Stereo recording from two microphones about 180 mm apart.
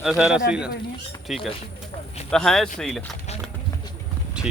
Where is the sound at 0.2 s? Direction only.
5° right (ahead or behind).